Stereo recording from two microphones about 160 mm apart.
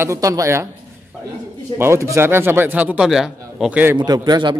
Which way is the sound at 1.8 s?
15° right (ahead or behind).